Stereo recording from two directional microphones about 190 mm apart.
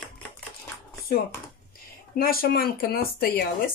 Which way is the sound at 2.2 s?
50° left (ahead or behind).